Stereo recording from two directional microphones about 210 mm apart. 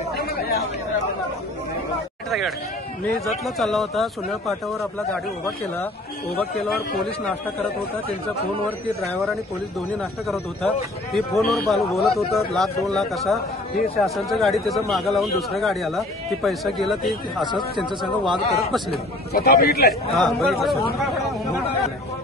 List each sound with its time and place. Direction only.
0.1 s chatter: 50° left (ahead or behind)
3.4 s speech: centre (ahead or behind)
9.8 s speech: centre (ahead or behind)
19.3 s speech: 45° left (ahead or behind)
19.9 s speech: centre (ahead or behind)